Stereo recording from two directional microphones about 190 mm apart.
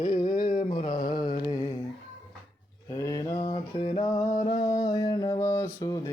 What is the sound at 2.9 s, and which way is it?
Mantra, 20° left (ahead or behind).